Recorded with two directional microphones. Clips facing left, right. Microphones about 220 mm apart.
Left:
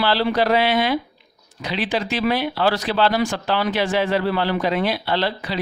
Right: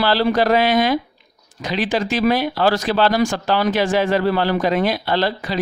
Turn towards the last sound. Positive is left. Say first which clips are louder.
# right 3 dB
turn(degrees=-45)  # may be behind; listen again after turning